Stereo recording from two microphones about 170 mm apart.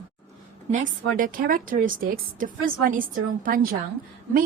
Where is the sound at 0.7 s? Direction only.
55° right (ahead or behind).